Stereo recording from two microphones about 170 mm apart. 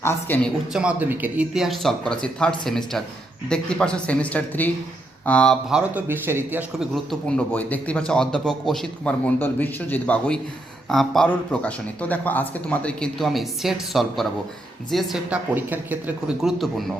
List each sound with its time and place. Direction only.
0.0 s speech: 15° left (ahead or behind)
0.7 s a man's voice: 5° right (ahead or behind)